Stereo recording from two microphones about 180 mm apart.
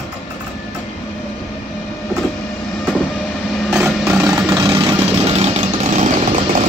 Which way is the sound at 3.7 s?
5° right (ahead or behind).